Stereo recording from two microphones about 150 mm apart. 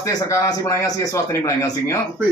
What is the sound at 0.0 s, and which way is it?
A man's voice, 20° left (ahead or behind).